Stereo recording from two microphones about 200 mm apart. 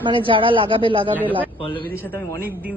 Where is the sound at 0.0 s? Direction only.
25° right (ahead or behind).